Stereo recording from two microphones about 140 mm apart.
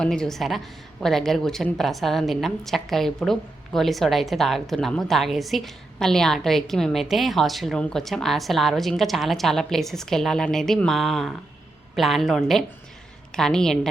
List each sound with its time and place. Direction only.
0.0 s a woman's voice: 5° left (ahead or behind)